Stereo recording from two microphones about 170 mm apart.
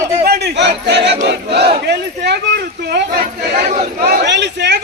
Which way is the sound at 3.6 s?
40° right (ahead or behind).